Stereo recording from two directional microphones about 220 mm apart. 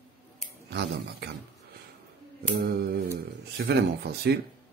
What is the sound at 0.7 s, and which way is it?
Speech, 50° right (ahead or behind).